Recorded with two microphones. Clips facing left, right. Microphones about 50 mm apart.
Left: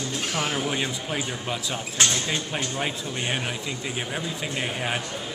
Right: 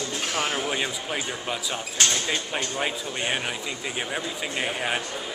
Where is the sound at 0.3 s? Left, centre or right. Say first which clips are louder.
Even; centre.